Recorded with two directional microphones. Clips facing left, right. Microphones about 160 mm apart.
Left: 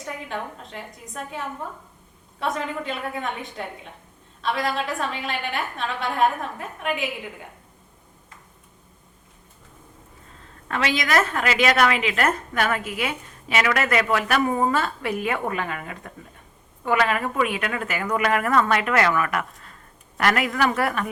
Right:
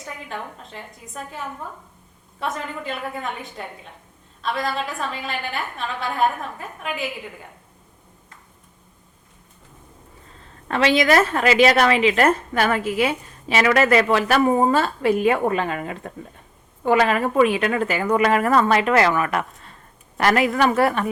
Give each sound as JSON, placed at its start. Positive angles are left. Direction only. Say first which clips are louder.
{"t": 0.0, "sound": "a woman's voice", "louder": "left 2 dB", "side_deg": 0}
{"t": 10.7, "sound": "a woman's voice", "louder": "right 6 dB", "side_deg": -30}